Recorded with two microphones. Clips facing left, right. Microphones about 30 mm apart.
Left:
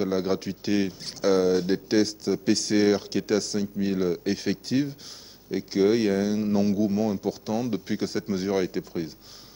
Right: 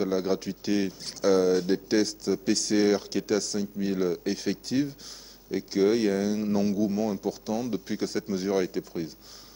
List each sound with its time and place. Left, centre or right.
0.0 s speech: centre